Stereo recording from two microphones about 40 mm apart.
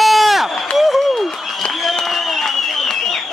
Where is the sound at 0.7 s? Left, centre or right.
Centre.